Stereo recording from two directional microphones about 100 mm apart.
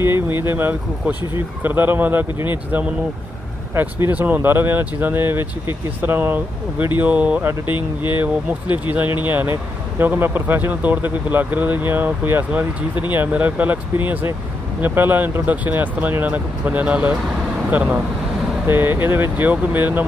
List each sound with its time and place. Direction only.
0.0 s speech: 20° right (ahead or behind)
3.7 s speech: 20° right (ahead or behind)
7.7 s speech: 55° left (ahead or behind)
8.2 s speech: 15° right (ahead or behind)